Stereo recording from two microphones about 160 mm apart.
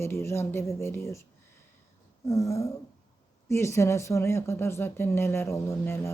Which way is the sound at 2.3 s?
20° left (ahead or behind).